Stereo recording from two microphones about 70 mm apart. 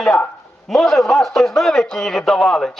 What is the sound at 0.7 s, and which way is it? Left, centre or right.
A man's voice, centre.